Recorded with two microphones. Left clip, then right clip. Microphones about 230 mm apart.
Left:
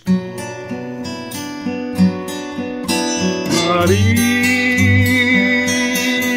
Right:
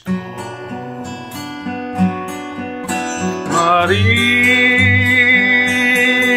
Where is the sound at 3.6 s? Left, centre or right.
Left.